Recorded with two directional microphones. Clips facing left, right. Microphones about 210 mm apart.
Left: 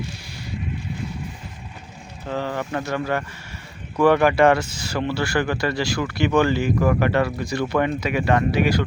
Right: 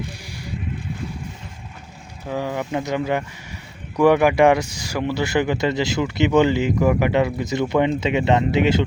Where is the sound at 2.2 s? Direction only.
10° right (ahead or behind).